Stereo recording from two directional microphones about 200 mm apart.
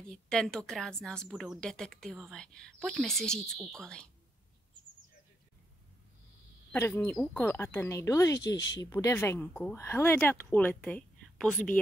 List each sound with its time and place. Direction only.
0.1 s a woman's voice: 5° left (ahead or behind)
6.7 s speech: 10° left (ahead or behind)
8.5 s speech: 65° left (ahead or behind)
8.9 s speech: 10° left (ahead or behind)